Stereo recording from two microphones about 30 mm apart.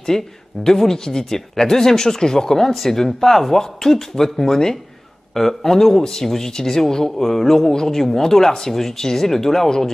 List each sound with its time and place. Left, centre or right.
0.1 s speech: centre